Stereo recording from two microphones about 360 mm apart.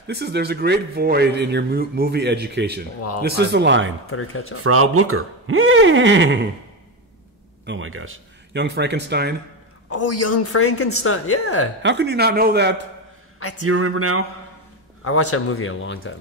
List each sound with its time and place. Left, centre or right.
0.0 s speech: right
4.1 s a woman's voice: left
4.6 s speech: right
7.6 s speech: right
9.8 s a woman's voice: left
11.8 s speech: right
13.7 s speech: right
15.0 s a woman's voice: left